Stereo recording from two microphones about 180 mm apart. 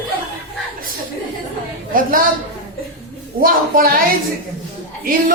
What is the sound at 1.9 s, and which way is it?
Speech, 50° right (ahead or behind).